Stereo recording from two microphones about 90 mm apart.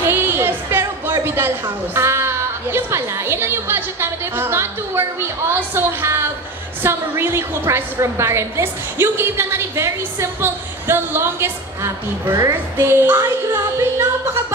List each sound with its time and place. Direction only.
0.0 s music: 25° right (ahead or behind)
2.0 s a woman's voice: 30° right (ahead or behind)